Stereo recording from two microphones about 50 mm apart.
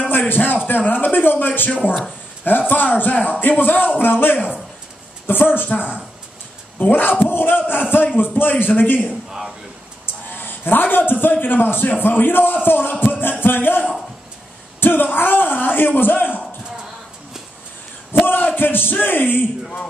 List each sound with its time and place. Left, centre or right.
0.3 s a man's voice: left
2.7 s a man's voice: left
10.3 s a man's voice: left
13.0 s music: left
14.8 s a man's voice: left
18.1 s a sound: left
18.6 s a man's voice: left